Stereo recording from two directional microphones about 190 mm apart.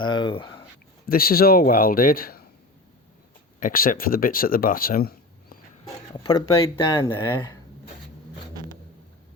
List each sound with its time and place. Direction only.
0.0 s speech: 25° left (ahead or behind)
1.0 s a man's voice: 50° left (ahead or behind)
3.6 s speech: 50° left (ahead or behind)
6.2 s speech: 20° left (ahead or behind)